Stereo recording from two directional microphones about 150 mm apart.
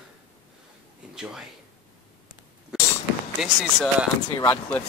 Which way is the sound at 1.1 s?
5° right (ahead or behind).